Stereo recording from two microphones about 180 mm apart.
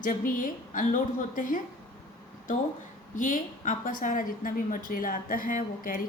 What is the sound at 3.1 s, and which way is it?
A woman's voice, 45° left (ahead or behind).